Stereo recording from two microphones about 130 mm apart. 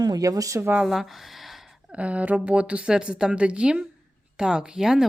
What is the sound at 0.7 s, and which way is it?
A woman's voice, 5° right (ahead or behind).